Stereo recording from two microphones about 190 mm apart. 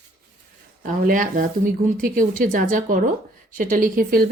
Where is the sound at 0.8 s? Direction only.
45° right (ahead or behind).